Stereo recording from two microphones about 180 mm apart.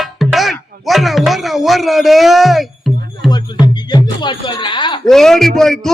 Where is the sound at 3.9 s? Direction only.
25° left (ahead or behind).